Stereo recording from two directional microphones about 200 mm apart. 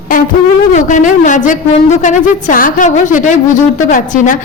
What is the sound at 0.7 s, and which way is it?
A woman's voice, 40° left (ahead or behind).